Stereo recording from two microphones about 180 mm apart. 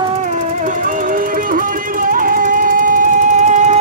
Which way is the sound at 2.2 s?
50° right (ahead or behind).